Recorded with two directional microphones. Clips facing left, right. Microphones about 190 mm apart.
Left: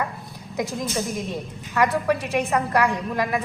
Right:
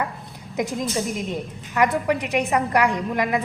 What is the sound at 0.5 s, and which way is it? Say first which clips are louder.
A woman's voice: right 2 dB; 20° right (ahead or behind).